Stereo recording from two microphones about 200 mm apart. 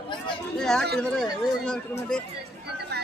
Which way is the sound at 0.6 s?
5° left (ahead or behind).